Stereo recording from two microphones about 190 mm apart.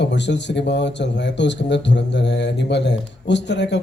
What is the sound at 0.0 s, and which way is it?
A man's voice, 65° left (ahead or behind).